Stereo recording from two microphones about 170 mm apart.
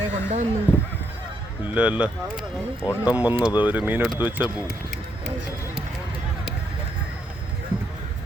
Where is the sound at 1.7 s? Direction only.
5° right (ahead or behind).